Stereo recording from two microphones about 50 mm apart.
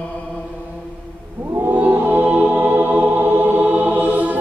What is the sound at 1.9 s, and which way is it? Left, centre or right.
Music, right.